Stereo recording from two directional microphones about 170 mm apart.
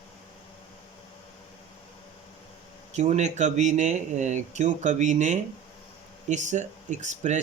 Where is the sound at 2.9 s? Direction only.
45° right (ahead or behind).